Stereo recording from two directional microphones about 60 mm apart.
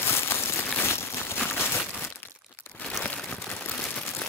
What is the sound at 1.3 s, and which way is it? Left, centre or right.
Crumpling, left.